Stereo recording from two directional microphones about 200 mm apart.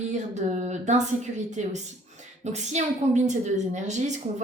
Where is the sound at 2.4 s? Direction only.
35° right (ahead or behind).